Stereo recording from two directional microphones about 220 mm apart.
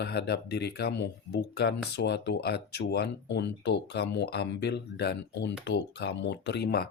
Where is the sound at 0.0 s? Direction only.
50° left (ahead or behind).